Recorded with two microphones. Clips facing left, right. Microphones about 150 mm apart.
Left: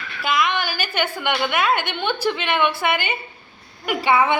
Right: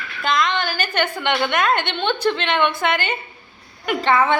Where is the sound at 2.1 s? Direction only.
10° left (ahead or behind).